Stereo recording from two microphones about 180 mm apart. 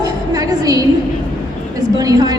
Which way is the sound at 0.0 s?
20° right (ahead or behind).